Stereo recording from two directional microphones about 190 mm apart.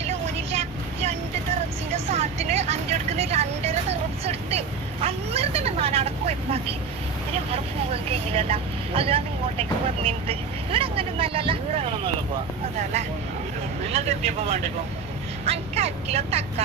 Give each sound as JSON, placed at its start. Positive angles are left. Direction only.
{"t": 0.0, "sound": "vehicle", "side_deg": -35}
{"t": 2.0, "sound": "vehicle", "side_deg": -35}
{"t": 5.0, "sound": "speech", "side_deg": -30}
{"t": 8.3, "sound": "speech", "side_deg": -30}
{"t": 13.9, "sound": "speech", "side_deg": -35}